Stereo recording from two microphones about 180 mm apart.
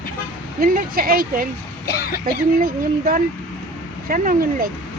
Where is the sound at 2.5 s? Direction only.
50° right (ahead or behind).